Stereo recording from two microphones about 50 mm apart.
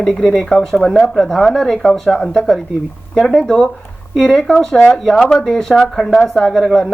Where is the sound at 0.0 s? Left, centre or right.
Centre.